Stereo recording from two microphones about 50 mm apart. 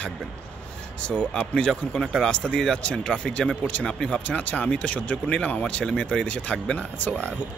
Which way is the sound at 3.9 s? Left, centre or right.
Centre.